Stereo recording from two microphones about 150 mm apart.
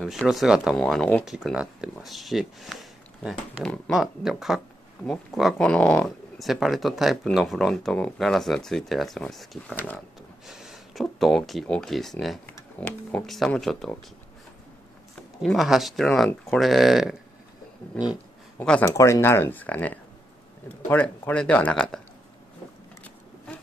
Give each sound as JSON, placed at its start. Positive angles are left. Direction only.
{"t": 0.3, "sound": "speech", "side_deg": -5}
{"t": 15.4, "sound": "speech", "side_deg": 0}
{"t": 18.9, "sound": "speech", "side_deg": 20}